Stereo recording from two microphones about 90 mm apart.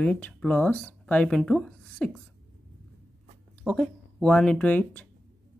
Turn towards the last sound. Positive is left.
turn(degrees=15)  # may be behind; listen again after turning